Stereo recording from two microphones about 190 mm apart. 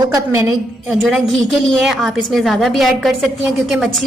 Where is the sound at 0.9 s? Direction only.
Centre (ahead or behind).